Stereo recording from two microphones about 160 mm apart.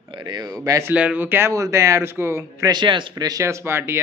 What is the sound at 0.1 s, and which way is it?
Speech, 25° right (ahead or behind).